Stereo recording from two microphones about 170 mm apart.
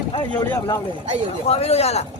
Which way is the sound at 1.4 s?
35° left (ahead or behind).